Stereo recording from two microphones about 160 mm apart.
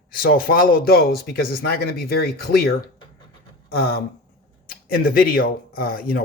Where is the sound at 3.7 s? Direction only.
70° left (ahead or behind).